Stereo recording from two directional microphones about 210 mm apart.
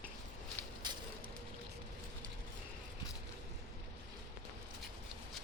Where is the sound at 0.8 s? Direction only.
20° right (ahead or behind).